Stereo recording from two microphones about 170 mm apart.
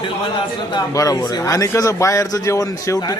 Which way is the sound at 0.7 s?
20° left (ahead or behind).